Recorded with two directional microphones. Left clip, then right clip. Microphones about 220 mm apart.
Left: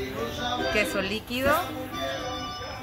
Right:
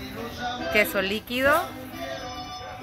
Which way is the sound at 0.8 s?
35° right (ahead or behind).